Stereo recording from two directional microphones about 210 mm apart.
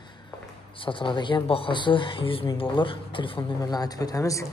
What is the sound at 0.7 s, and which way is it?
Speech, 25° left (ahead or behind).